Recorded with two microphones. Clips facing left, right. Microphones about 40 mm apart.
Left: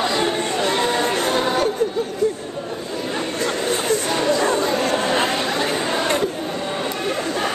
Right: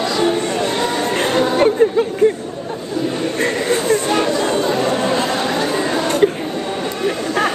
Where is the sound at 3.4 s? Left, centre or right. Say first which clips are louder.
Right 5 dB; right.